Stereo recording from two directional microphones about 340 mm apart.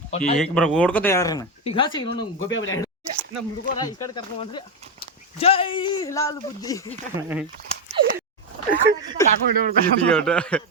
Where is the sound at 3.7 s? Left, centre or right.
Centre.